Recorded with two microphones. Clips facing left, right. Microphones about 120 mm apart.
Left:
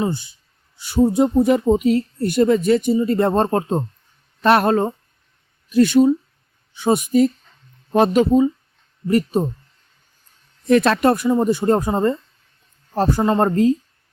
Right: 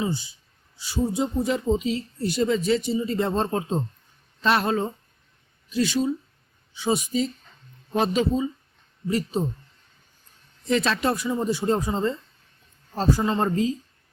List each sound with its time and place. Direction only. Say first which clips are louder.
0.0 s speech: left 5 dB; 55° left (ahead or behind)
10.7 s speech: left 8 dB; 60° left (ahead or behind)